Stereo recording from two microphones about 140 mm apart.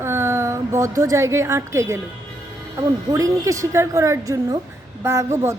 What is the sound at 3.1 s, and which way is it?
A woman's voice, 25° right (ahead or behind).